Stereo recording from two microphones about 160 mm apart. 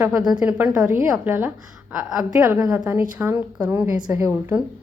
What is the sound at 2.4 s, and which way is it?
Speech, 20° right (ahead or behind).